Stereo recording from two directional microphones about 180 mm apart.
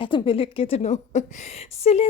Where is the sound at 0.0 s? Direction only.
30° left (ahead or behind).